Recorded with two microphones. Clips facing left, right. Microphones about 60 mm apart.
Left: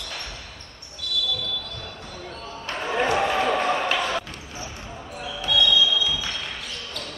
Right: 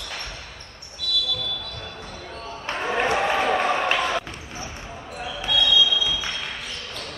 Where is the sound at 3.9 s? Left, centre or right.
Centre.